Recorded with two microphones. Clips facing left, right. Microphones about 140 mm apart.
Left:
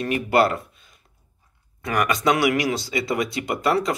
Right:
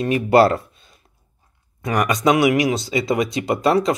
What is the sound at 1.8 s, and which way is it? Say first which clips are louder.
Speech: right 3 dB; 20° right (ahead or behind).